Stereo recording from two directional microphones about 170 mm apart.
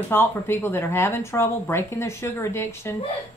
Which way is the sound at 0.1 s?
15° left (ahead or behind).